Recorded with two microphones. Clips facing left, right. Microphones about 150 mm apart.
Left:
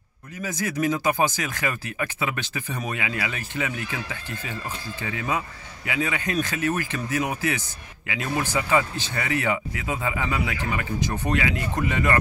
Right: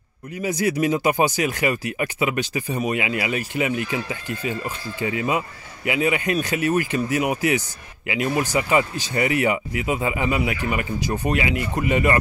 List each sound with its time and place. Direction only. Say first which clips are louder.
0.4 s speech: right 5 dB; 15° right (ahead or behind)